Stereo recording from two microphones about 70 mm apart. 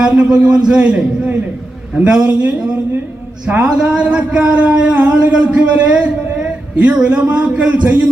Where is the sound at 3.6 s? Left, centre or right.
Centre.